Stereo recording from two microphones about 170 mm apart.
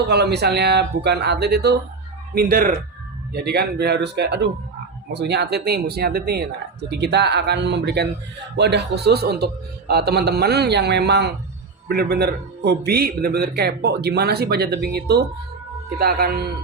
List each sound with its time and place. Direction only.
0.1 s a man's voice: 75° right (ahead or behind)
2.3 s speech: 60° right (ahead or behind)
3.3 s a man's voice: 70° right (ahead or behind)
6.9 s a man's voice: 80° right
16.0 s speech: 65° right (ahead or behind)